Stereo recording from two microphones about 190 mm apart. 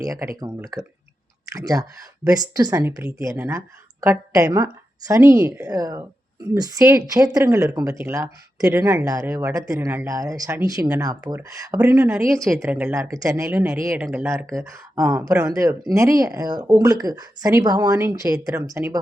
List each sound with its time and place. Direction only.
0.0 s speech: 15° right (ahead or behind)
11.8 s speech: 5° right (ahead or behind)